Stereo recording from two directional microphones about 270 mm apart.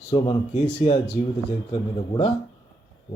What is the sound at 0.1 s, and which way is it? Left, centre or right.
Speech, centre.